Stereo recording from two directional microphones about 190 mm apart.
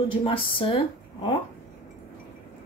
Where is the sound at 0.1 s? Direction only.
25° left (ahead or behind).